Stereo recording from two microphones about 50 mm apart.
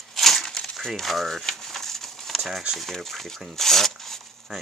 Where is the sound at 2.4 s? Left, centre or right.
Centre.